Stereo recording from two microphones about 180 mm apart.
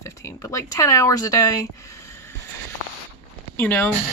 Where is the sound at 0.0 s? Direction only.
15° left (ahead or behind).